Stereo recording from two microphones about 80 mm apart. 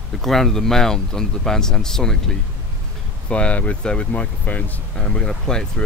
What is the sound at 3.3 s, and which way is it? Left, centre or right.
A man's voice, centre.